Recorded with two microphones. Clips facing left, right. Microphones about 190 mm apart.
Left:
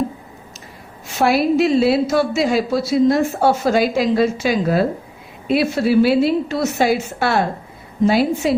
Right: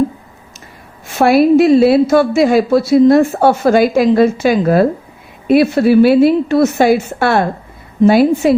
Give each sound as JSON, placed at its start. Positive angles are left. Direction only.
{"t": 1.2, "sound": "a woman's voice", "side_deg": -55}